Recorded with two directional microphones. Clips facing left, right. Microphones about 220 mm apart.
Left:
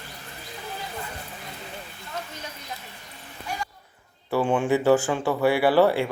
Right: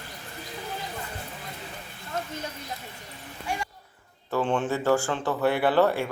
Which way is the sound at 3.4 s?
25° right (ahead or behind).